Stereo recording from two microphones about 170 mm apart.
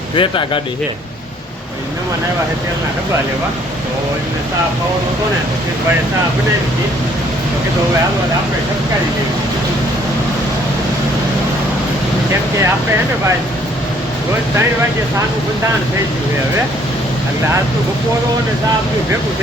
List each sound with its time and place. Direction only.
0.2 s speech: 30° left (ahead or behind)